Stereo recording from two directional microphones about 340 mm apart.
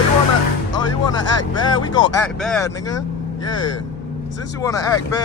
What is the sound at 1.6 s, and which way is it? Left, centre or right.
Speech, centre.